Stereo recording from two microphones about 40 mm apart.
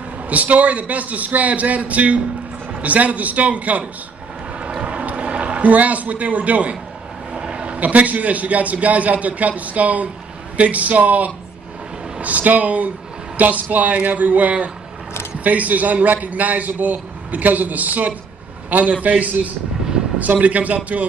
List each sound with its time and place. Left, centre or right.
0.3 s a man's voice: right
4.6 s vehicle: right
5.0 s a man's voice: right
7.3 s a man's voice: right